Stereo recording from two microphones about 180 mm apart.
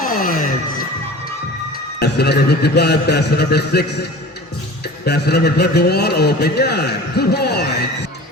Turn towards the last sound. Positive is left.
turn(degrees=65)  # may be behind; listen again after turning